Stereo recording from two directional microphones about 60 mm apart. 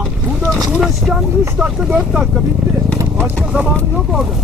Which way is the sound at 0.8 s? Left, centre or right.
Centre.